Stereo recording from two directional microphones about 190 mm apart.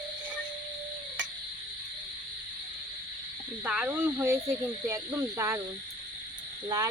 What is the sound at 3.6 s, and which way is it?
Speech, 5° right (ahead or behind).